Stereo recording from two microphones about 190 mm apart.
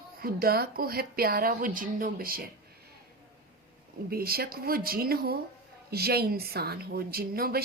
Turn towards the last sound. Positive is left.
turn(degrees=-50)  # may be behind; listen again after turning